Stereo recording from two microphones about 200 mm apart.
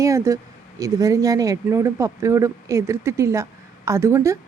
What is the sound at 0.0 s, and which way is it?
Speech, 15° right (ahead or behind).